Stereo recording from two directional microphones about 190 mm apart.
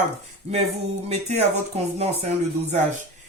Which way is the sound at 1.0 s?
35° right (ahead or behind).